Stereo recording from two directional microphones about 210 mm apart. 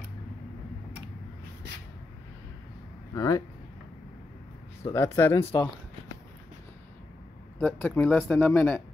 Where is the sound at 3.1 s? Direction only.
15° left (ahead or behind).